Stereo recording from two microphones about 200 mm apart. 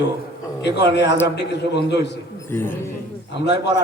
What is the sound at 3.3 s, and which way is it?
Speech, 60° left (ahead or behind).